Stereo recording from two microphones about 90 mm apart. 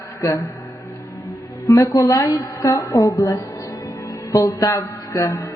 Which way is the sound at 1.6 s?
35° left (ahead or behind).